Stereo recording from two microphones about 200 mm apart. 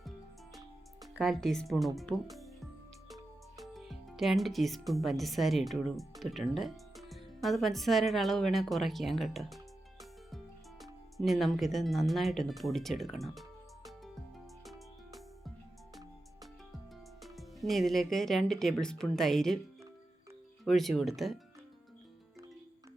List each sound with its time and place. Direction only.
1.1 s speech: centre (ahead or behind)
2.3 s music: centre (ahead or behind)
4.9 s speech: centre (ahead or behind)
10.0 s music: centre (ahead or behind)
17.2 s speech: centre (ahead or behind)
20.7 s speech: centre (ahead or behind)